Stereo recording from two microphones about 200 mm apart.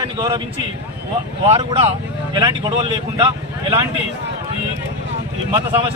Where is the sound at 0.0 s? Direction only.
20° right (ahead or behind).